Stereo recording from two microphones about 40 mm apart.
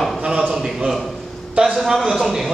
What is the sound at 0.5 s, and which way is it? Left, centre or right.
A man's voice, centre.